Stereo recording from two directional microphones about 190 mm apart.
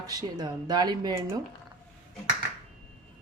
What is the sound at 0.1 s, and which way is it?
Speech, 20° right (ahead or behind).